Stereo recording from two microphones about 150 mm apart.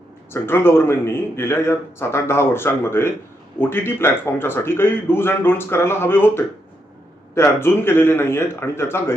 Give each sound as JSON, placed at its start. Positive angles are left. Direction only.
{"t": 0.4, "sound": "a man's voice", "side_deg": 15}